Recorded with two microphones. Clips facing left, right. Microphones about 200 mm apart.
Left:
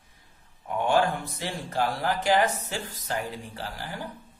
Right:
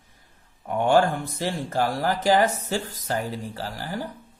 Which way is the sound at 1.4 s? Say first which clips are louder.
Right 4 dB; 40° right (ahead or behind).